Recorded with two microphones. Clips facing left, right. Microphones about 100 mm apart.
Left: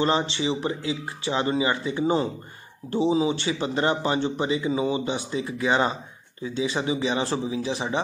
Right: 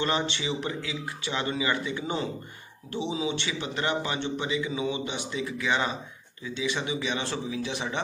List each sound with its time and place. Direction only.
0.0 s a man's voice: 30° left (ahead or behind)